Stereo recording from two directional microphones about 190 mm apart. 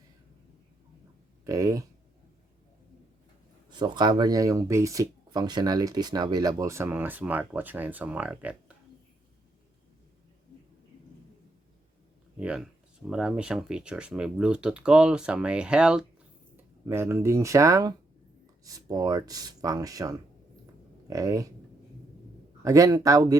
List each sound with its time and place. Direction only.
1.5 s speech: 15° right (ahead or behind)
3.7 s speech: 25° right (ahead or behind); by 8.7 s 5° right (ahead or behind)
12.4 s speech: 5° right (ahead or behind)
22.6 s speech: 15° right (ahead or behind)